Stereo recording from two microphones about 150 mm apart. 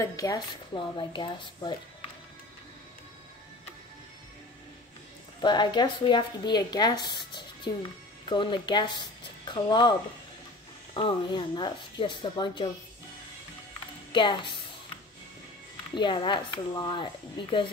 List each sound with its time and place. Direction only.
0.0 s speech: 25° left (ahead or behind)
0.9 s speech: 35° left (ahead or behind)
5.4 s speech: 30° left (ahead or behind)
11.0 s speech: 30° left (ahead or behind)
14.1 s speech: 30° left (ahead or behind)
15.9 s speech: 30° left (ahead or behind)